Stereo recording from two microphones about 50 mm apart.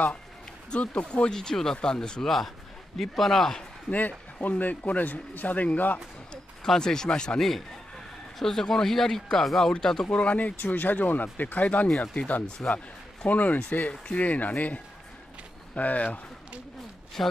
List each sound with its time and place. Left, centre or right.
0.7 s speech: left
2.2 s speech: centre
4.4 s a man's voice: left
6.3 s speech: centre
10.0 s a man's voice: left
12.6 s speech: centre
13.3 s a man's voice: left
17.2 s speech: centre